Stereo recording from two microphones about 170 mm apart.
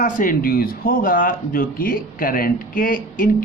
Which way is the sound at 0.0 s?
50° left (ahead or behind).